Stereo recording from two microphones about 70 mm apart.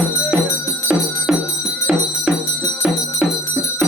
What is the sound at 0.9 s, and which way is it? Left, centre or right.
Music, centre.